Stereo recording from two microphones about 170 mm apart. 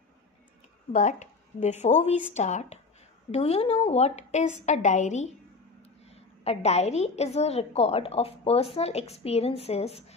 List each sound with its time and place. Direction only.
0.9 s a woman's voice: 45° left (ahead or behind)